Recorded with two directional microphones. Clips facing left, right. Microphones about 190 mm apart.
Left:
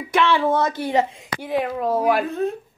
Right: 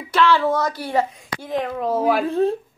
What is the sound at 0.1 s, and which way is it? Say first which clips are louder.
Speech: right 1 dB; 20° left (ahead or behind).